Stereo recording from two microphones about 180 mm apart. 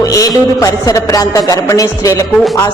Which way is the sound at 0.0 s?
20° left (ahead or behind).